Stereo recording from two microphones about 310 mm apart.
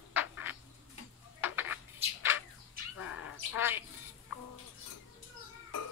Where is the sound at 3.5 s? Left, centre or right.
Centre.